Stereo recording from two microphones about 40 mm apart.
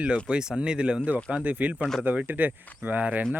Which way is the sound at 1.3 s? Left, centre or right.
Right.